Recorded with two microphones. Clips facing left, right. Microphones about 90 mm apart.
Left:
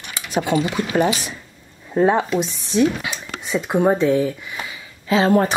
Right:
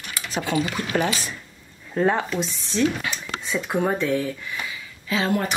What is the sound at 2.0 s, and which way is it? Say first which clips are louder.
Speech: left 5 dB; 20° left (ahead or behind).